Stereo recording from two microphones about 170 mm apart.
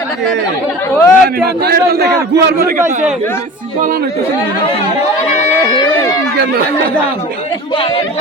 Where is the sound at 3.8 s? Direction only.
60° right (ahead or behind).